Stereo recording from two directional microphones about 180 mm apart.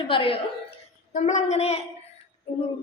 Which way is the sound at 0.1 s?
30° left (ahead or behind).